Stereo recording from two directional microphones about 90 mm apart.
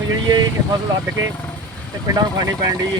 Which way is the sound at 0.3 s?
50° right (ahead or behind).